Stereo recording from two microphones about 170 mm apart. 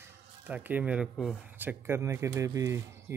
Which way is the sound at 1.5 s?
10° right (ahead or behind).